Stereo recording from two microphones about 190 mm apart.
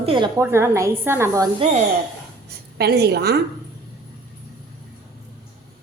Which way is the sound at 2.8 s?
60° right (ahead or behind).